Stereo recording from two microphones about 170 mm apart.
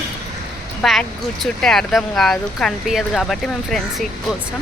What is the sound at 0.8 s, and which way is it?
Speech, centre (ahead or behind).